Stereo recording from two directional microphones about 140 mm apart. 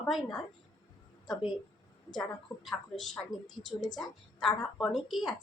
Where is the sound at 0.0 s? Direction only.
Centre (ahead or behind).